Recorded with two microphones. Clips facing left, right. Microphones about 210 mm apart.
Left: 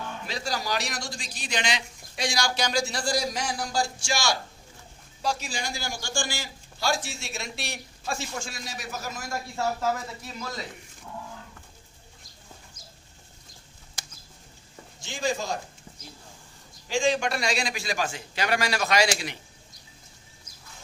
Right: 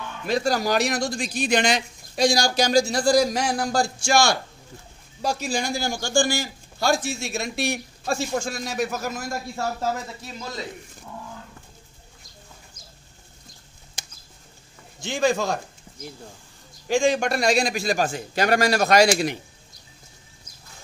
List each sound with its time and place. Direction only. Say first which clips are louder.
0.3 s a man's voice: right 10 dB; 50° right (ahead or behind)
15.0 s a man's voice: right 7 dB; 65° right (ahead or behind)
16.8 s a man's voice: right 4 dB; 50° right (ahead or behind)